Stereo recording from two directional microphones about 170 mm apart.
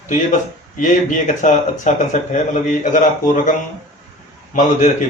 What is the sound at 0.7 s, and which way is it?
Speech, 50° left (ahead or behind).